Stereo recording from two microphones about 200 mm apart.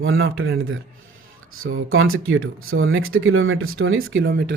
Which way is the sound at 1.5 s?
90° right.